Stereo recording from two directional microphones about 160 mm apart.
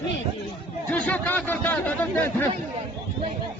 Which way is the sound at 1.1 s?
10° left (ahead or behind).